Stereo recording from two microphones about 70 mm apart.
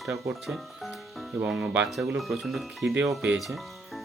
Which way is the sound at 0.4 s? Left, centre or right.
Centre.